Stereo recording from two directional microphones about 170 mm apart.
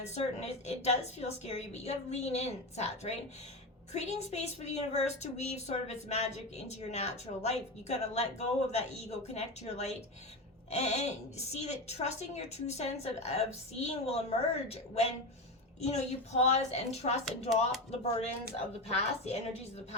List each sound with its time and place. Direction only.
0.0 s a woman's voice: 40° left (ahead or behind)
18.9 s a woman's voice: 40° left (ahead or behind)